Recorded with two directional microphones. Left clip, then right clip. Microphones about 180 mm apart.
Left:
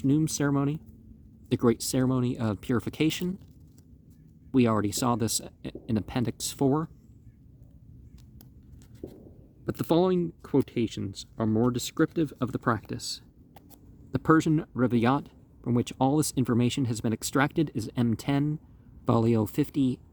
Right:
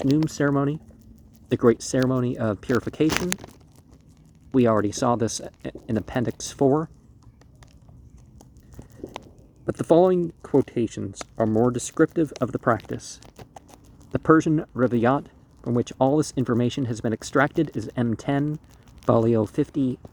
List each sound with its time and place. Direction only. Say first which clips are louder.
0.1 s speech: right 4 dB; 20° left (ahead or behind)
4.5 s speech: right 5 dB; 30° left (ahead or behind)
9.6 s speech: right 7 dB; 15° left (ahead or behind)
14.2 s speech: right 5 dB; 25° left (ahead or behind)